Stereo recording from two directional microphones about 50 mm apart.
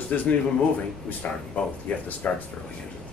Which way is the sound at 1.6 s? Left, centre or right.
Left.